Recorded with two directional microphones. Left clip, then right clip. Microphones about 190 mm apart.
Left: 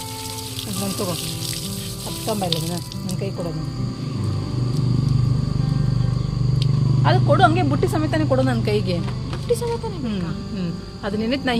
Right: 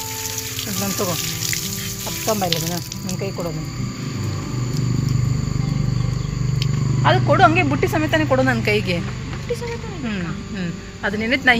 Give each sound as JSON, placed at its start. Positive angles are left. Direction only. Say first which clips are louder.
{"t": 2.2, "sound": "speech", "louder": "right 4 dB", "side_deg": -25}
{"t": 7.0, "sound": "speech", "louder": "right 3 dB", "side_deg": -20}
{"t": 10.6, "sound": "speech", "louder": "right 6 dB", "side_deg": 5}